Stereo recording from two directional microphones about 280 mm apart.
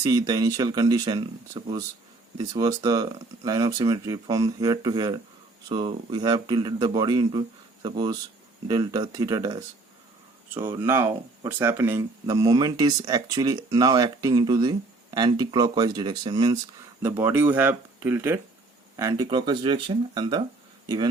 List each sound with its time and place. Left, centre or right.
0.0 s speech: centre